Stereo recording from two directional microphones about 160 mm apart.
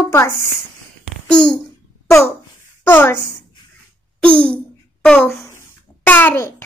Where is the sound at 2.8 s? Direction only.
15° left (ahead or behind).